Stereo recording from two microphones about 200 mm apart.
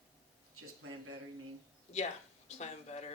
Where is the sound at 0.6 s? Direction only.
90° right.